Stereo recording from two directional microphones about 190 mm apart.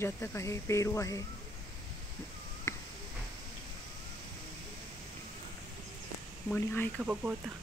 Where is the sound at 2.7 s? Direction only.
15° left (ahead or behind).